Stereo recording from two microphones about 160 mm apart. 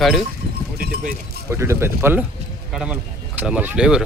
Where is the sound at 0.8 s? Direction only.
65° right (ahead or behind).